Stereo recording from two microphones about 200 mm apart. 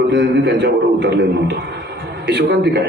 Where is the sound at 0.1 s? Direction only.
60° right (ahead or behind).